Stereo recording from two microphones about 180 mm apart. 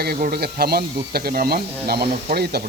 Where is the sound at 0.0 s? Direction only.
60° right (ahead or behind).